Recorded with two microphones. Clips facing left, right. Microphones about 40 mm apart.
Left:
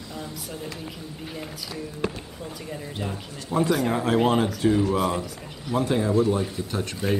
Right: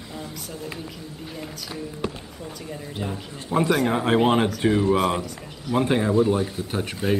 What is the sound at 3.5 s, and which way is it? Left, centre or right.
Speech, right.